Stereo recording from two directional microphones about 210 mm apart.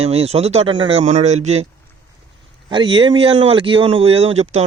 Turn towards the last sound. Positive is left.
turn(degrees=-30)  # may be behind; listen again after turning